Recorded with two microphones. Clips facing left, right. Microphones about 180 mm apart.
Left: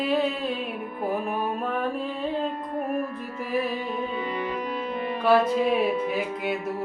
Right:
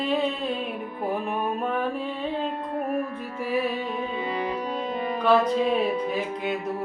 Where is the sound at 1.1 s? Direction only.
Centre (ahead or behind).